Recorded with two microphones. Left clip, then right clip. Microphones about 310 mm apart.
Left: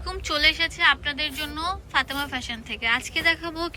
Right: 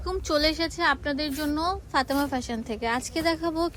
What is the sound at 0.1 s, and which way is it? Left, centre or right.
A woman's voice, centre.